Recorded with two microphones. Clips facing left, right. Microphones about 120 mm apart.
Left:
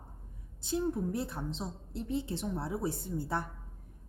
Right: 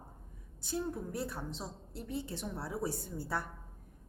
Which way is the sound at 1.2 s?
20° left (ahead or behind).